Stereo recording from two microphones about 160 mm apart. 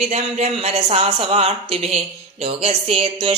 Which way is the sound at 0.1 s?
40° right (ahead or behind).